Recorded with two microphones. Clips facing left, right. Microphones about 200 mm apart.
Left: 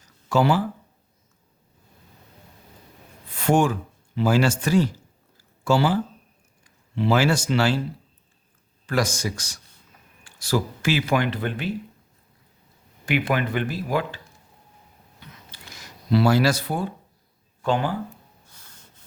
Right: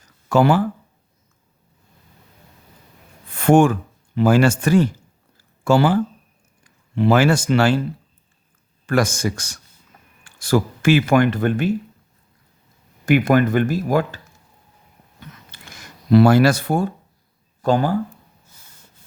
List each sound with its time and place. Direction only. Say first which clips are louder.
0.3 s speech: right 4 dB; 55° right (ahead or behind)
3.3 s speech: right 6 dB; 50° right (ahead or behind)
8.9 s speech: right 5 dB; 50° right (ahead or behind)
13.1 s speech: right 8 dB; 45° right (ahead or behind)
15.7 s speech: right 7 dB; 55° right (ahead or behind)